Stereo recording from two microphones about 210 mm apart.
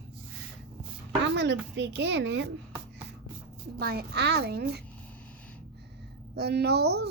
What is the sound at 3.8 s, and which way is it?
A child's voice, 45° right (ahead or behind).